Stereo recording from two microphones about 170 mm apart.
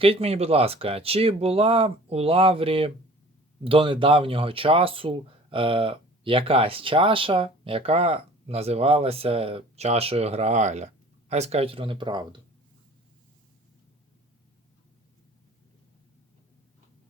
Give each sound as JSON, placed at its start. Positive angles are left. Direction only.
{"t": 0.0, "sound": "speech", "side_deg": -35}